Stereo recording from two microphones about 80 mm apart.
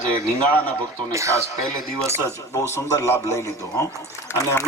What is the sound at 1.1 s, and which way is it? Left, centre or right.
Speech, right.